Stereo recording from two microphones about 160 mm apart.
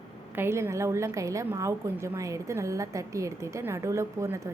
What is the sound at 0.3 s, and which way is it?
A woman's voice, 15° right (ahead or behind).